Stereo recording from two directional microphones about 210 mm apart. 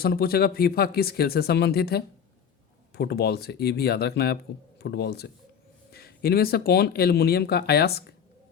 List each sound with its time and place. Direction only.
0.0 s speech: 45° left (ahead or behind)